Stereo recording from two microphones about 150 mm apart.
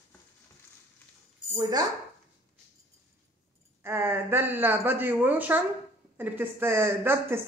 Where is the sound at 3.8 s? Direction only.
15° right (ahead or behind).